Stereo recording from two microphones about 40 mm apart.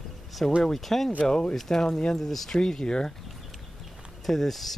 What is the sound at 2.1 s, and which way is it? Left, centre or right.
Speech, centre.